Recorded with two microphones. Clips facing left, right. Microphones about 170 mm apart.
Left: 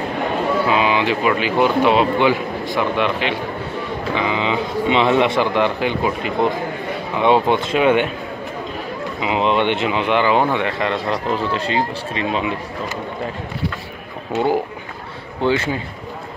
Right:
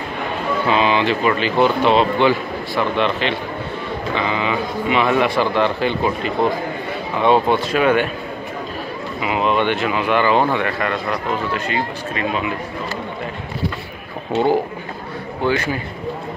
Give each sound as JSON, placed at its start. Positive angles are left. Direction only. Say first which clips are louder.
{"t": 0.7, "sound": "speech", "louder": "right 4 dB", "side_deg": 10}
{"t": 9.2, "sound": "speech", "louder": "left 1 dB", "side_deg": 20}
{"t": 14.3, "sound": "speech", "louder": "right 2 dB", "side_deg": 10}
{"t": 15.4, "sound": "speech", "louder": "left 1 dB", "side_deg": 25}